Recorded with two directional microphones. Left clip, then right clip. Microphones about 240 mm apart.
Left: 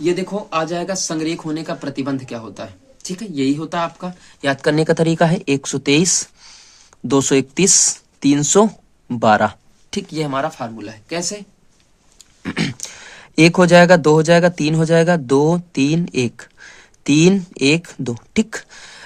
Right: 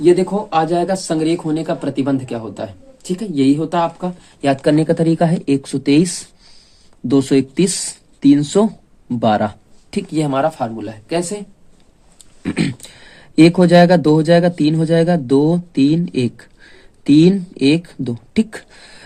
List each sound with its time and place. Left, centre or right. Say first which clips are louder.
0.0 s speech: right 7 dB; centre
4.6 s speech: even; left; by 11.4 s centre
12.4 s speech: right 2 dB; left